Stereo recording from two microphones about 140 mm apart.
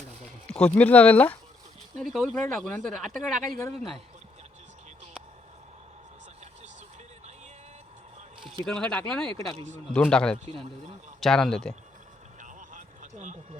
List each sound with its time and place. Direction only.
0.4 s speech: 10° left (ahead or behind)
2.0 s speech: centre (ahead or behind)
8.4 s speech: 5° left (ahead or behind)
12.4 s vehicle: 65° right (ahead or behind)